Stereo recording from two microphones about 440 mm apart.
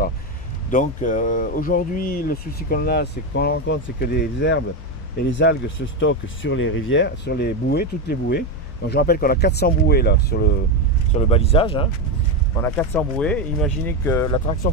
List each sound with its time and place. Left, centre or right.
0.7 s speech: centre